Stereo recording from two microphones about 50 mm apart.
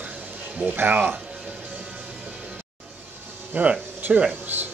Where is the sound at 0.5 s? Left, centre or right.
Right.